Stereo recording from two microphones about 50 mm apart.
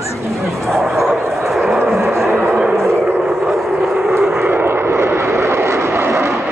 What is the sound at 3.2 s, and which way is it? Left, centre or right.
Vehicle, centre.